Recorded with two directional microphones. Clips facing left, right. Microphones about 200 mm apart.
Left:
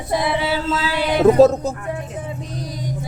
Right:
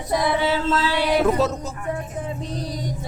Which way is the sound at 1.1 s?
45° left (ahead or behind).